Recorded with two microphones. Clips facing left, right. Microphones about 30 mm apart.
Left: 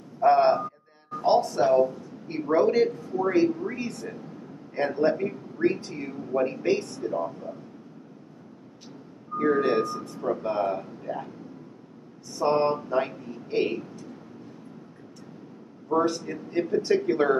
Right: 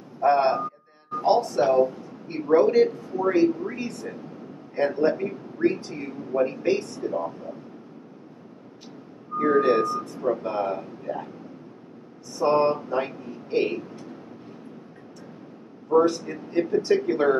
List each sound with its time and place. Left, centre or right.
0.2 s a sound: centre
1.2 s music: centre
2.2 s a man's voice: centre
7.0 s speech: centre
9.4 s speech: centre
12.3 s a man's voice: centre
15.9 s a man's voice: centre